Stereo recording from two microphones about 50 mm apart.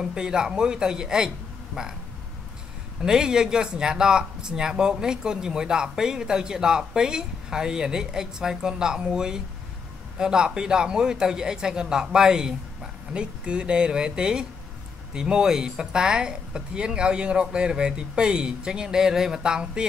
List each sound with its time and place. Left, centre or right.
0.0 s speech: centre
3.0 s speech: centre